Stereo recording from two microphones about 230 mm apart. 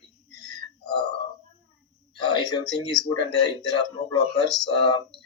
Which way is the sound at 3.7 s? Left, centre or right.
Centre.